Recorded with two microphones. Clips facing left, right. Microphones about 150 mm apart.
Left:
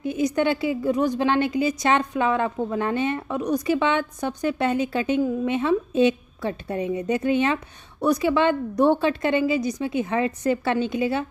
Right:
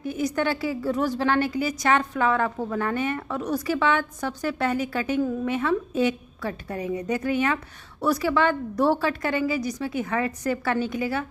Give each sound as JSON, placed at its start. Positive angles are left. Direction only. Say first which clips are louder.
{"t": 0.0, "sound": "a woman's voice", "louder": "left 3 dB", "side_deg": 20}